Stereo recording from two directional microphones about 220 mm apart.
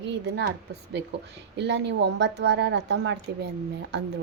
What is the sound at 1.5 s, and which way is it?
A woman's voice, 50° right (ahead or behind).